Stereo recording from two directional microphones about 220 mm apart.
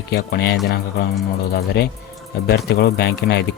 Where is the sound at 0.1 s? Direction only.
45° left (ahead or behind).